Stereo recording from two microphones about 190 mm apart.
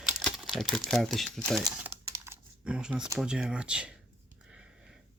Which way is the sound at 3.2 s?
5° right (ahead or behind).